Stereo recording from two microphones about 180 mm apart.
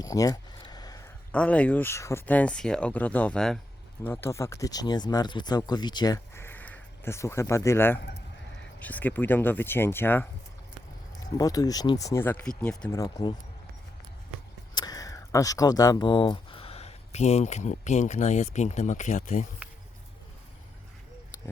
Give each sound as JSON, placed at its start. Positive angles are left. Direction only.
{"t": 0.0, "sound": "a sound", "side_deg": 20}
{"t": 1.3, "sound": "speech", "side_deg": 5}
{"t": 11.3, "sound": "speech", "side_deg": 20}
{"t": 13.0, "sound": "speech", "side_deg": 20}
{"t": 14.8, "sound": "speech", "side_deg": 20}